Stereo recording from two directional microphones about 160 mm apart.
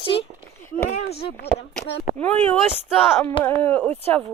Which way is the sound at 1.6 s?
90° left.